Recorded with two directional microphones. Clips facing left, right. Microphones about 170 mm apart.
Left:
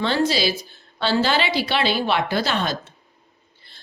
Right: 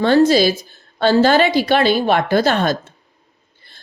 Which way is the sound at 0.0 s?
45° right (ahead or behind).